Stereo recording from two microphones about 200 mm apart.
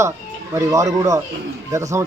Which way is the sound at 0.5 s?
15° right (ahead or behind).